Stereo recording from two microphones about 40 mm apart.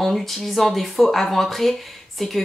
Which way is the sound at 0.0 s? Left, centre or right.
Centre.